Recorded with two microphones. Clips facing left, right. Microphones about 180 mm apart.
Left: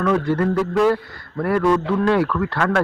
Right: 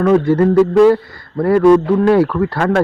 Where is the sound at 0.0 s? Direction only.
30° right (ahead or behind).